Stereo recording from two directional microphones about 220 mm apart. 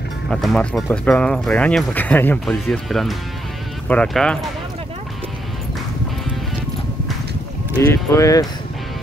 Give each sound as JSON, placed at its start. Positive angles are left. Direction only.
{"t": 0.3, "sound": "speech", "side_deg": 0}
{"t": 7.8, "sound": "speech", "side_deg": 15}